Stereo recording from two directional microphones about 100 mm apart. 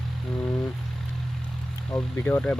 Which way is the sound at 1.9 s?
20° left (ahead or behind).